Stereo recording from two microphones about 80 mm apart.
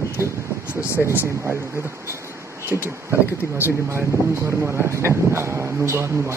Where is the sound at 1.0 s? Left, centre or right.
Right.